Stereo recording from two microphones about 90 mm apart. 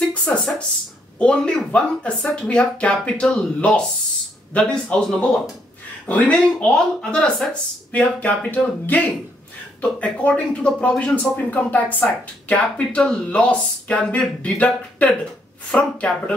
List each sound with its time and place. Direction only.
0.1 s speech: 10° left (ahead or behind)